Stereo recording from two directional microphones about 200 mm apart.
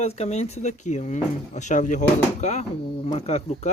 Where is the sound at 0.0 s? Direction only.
30° left (ahead or behind).